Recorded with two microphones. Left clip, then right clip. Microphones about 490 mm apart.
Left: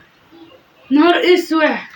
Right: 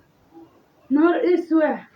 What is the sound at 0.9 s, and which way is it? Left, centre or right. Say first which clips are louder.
Speech: left 6 dB; right.